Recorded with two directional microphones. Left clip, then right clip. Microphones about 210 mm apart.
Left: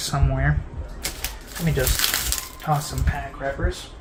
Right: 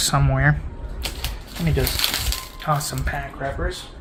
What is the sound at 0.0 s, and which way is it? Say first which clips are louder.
Speech: right 6 dB; 50° right (ahead or behind).